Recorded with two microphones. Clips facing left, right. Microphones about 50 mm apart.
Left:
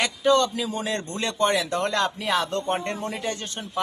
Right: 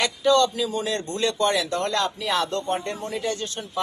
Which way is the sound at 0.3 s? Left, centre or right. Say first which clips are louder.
Right 1 dB; left.